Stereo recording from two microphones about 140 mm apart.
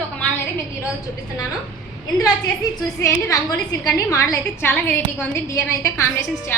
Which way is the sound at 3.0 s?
20° left (ahead or behind).